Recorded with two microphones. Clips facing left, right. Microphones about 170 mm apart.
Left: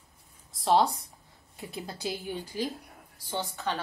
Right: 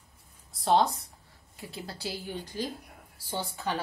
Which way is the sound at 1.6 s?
20° left (ahead or behind).